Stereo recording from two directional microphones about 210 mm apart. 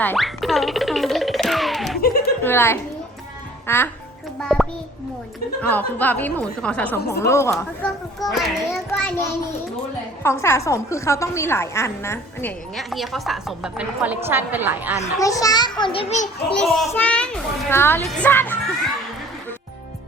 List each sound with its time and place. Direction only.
0.0 s music: 5° left (ahead or behind)
2.0 s a sound: 45° left (ahead or behind)
2.4 s music: 10° left (ahead or behind)
3.7 s speech: 10° left (ahead or behind)
4.4 s a sound: centre (ahead or behind)
5.6 s speech: 10° left (ahead or behind)
7.5 s a woman's voice: centre (ahead or behind)
8.9 s a woman's voice: 10° left (ahead or behind); by 14.9 s 10° right (ahead or behind)
15.0 s a child's voice: 15° left (ahead or behind); by 16.3 s 35° left (ahead or behind)
16.7 s a woman's voice: 5° left (ahead or behind)